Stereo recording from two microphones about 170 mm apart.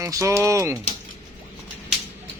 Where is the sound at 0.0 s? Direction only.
15° right (ahead or behind).